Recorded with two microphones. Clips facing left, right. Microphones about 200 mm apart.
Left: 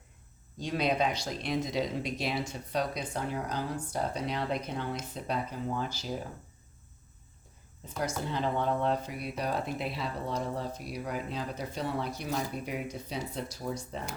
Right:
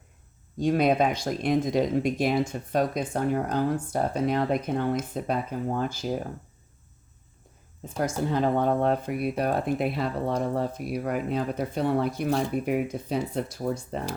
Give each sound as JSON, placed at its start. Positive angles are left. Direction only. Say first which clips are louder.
{"t": 0.6, "sound": "speech", "louder": "right 7 dB", "side_deg": -50}
{"t": 7.9, "sound": "speech", "louder": "right 7 dB", "side_deg": -50}